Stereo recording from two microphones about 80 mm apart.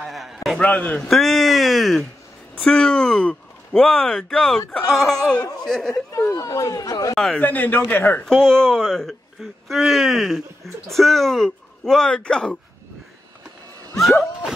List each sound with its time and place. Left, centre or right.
0.0 s a sound: centre
0.6 s speech: centre
1.0 s speech: centre
2.5 s speech: centre
6.3 s speech: left
7.3 s a man's voice: centre
8.3 s speech: centre